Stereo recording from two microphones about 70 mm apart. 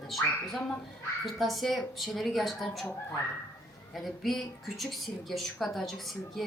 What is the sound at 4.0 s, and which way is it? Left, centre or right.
Speech, centre.